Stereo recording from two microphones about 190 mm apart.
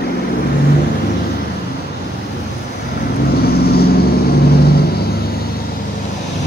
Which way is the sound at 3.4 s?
55° left (ahead or behind).